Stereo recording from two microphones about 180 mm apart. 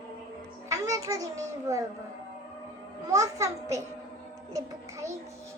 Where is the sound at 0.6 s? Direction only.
15° right (ahead or behind).